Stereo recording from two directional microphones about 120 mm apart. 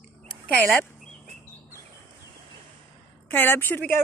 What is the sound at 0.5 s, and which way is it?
Speech, 15° left (ahead or behind).